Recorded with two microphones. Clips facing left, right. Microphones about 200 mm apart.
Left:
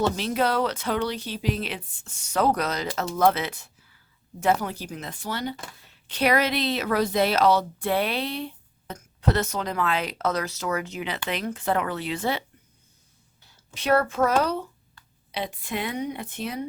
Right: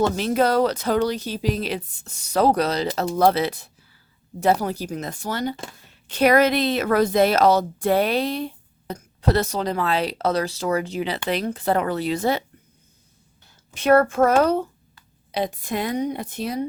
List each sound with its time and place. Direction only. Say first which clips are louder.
0.2 s speech: right 5 dB; 45° right (ahead or behind)
13.7 s speech: right 6 dB; 50° right (ahead or behind)